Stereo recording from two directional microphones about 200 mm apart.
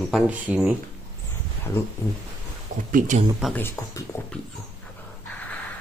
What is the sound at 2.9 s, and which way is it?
Speech, 40° right (ahead or behind).